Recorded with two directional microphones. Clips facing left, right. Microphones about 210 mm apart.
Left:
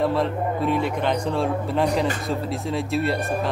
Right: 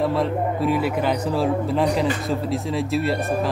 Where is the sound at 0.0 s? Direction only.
Centre (ahead or behind).